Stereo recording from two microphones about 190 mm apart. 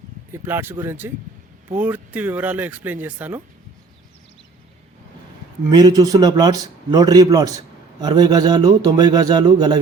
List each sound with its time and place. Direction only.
0.3 s speech: 10° right (ahead or behind)
5.8 s a man's voice: 20° right (ahead or behind)